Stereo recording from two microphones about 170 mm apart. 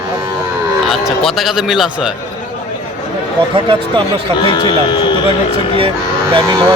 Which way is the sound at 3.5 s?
30° right (ahead or behind).